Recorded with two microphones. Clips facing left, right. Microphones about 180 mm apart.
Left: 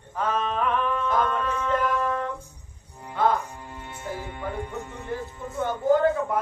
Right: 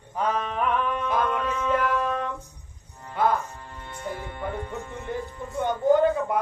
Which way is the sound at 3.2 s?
10° right (ahead or behind).